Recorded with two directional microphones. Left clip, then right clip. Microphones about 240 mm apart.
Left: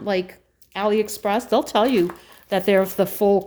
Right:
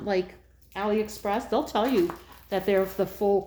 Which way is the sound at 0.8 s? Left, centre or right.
Left.